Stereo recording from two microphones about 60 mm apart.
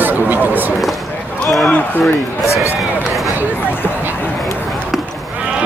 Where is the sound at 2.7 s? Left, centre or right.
Centre.